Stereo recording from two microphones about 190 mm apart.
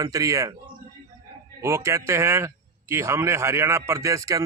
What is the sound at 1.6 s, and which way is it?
A man's voice, 15° right (ahead or behind).